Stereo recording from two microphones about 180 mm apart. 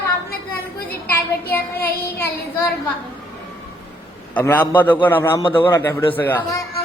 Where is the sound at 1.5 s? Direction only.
10° left (ahead or behind).